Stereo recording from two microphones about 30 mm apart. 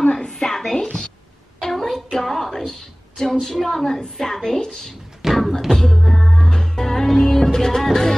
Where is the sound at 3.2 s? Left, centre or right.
Centre.